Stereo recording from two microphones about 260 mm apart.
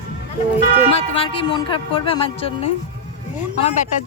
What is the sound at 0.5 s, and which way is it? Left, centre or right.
Speech, left.